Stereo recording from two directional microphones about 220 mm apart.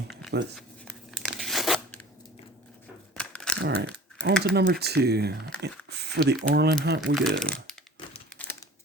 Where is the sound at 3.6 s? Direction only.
45° right (ahead or behind).